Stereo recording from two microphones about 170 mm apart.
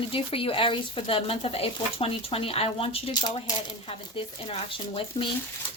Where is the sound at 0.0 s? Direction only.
30° left (ahead or behind).